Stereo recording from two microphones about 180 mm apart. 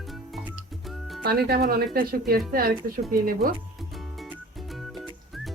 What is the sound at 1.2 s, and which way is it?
Speech, 60° right (ahead or behind).